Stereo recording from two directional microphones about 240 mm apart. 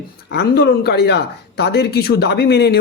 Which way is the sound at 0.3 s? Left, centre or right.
Left.